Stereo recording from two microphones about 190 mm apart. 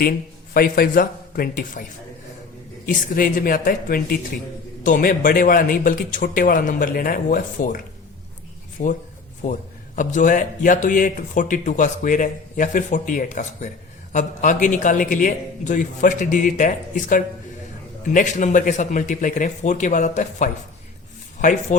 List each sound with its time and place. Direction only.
0.5 s speech: 50° left (ahead or behind)
2.8 s speech: 45° left (ahead or behind)
9.4 s speech: 40° left (ahead or behind)